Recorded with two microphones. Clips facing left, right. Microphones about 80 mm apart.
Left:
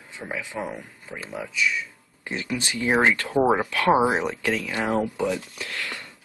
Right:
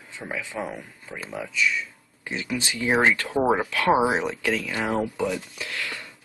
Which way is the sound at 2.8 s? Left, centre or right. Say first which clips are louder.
Even; centre.